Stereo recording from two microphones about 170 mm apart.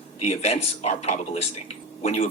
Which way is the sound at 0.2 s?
40° left (ahead or behind).